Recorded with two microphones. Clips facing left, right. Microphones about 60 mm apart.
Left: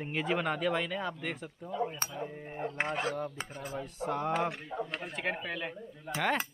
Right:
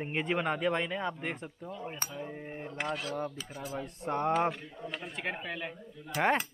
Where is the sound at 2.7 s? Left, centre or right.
Left.